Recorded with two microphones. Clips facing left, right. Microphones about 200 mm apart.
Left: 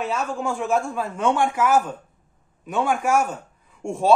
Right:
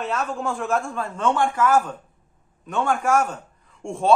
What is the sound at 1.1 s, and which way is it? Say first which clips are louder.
A man's voice: even; 15° left (ahead or behind).